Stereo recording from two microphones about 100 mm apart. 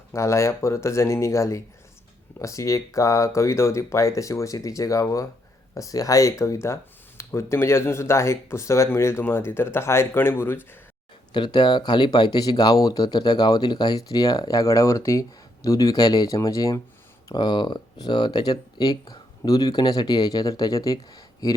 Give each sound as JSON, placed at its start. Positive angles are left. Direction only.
{"t": 0.1, "sound": "speech", "side_deg": 30}
{"t": 11.3, "sound": "speech", "side_deg": 50}
{"t": 17.3, "sound": "speech", "side_deg": 50}